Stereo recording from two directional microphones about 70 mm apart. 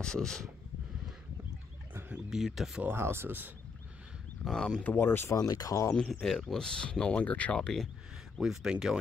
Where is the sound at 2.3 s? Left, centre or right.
Centre.